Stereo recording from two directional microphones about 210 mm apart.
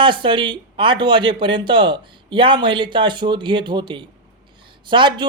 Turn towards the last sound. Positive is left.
turn(degrees=-20)  # may be behind; listen again after turning